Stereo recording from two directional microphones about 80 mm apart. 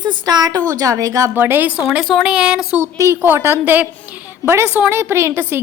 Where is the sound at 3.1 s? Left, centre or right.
Right.